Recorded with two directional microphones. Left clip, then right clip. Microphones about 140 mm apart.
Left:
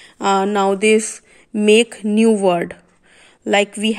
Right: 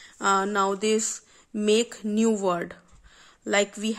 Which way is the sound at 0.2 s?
15° left (ahead or behind).